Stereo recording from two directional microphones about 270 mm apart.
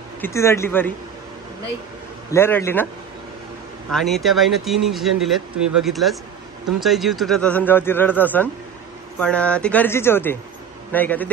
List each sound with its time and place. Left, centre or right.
0.2 s a man's voice: centre
2.3 s a man's voice: centre
3.9 s a man's voice: centre